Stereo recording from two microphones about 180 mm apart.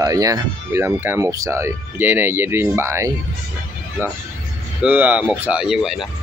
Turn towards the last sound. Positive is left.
turn(degrees=-5)  # may be behind; listen again after turning